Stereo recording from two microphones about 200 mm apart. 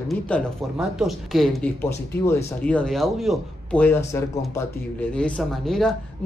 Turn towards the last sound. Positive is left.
turn(degrees=0)  # may be behind; listen again after turning